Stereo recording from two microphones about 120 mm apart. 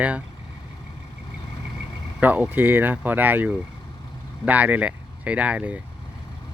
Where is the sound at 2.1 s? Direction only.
15° right (ahead or behind).